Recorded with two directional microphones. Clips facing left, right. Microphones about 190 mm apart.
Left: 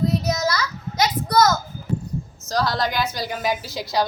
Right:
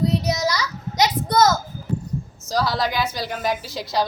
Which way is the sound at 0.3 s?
15° right (ahead or behind).